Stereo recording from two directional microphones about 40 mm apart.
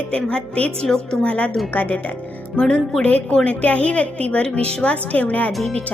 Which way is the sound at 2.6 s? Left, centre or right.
Left.